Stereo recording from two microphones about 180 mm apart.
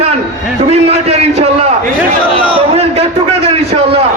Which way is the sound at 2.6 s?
35° right (ahead or behind).